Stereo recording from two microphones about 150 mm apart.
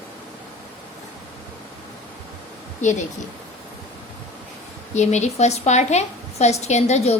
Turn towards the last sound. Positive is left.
turn(degrees=50)  # may be behind; listen again after turning